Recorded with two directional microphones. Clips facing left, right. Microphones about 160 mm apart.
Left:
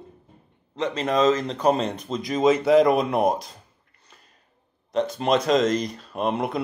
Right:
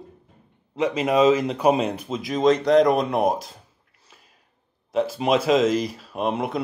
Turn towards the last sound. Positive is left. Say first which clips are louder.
# even
turn(degrees=0)  # may be behind; listen again after turning